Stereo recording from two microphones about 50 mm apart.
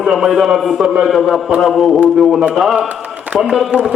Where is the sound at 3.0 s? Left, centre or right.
Right.